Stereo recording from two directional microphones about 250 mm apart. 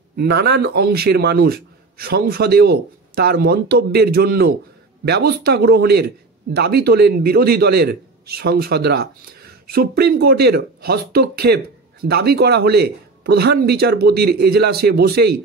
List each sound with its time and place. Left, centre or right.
0.2 s speech: right